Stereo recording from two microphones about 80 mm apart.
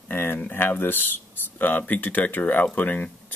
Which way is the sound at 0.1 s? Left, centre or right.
Left.